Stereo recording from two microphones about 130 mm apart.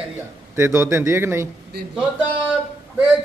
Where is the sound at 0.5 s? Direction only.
20° right (ahead or behind).